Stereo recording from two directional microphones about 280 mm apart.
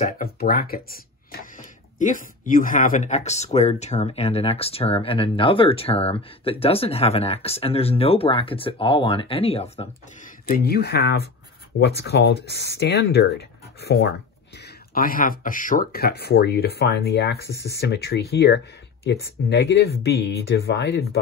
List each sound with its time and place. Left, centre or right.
0.0 s speech: left
10.5 s speech: left